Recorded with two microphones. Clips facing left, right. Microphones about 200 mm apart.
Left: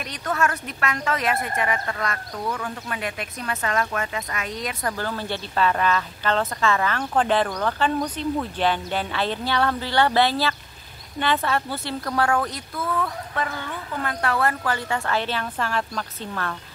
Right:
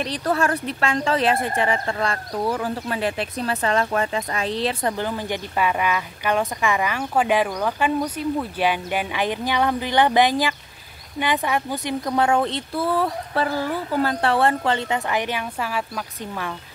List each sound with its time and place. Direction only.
0.0 s speech: 30° right (ahead or behind)
4.9 s a woman's voice: 15° right (ahead or behind)